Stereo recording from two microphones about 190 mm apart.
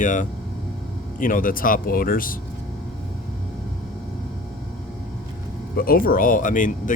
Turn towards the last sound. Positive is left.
turn(degrees=45)  # may be behind; listen again after turning